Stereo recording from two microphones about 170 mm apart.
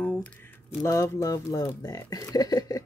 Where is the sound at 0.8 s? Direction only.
20° left (ahead or behind).